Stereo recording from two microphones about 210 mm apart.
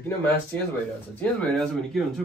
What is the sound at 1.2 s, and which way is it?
Speech, 5° left (ahead or behind).